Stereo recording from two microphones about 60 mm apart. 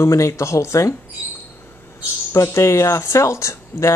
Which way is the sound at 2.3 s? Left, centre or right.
Left.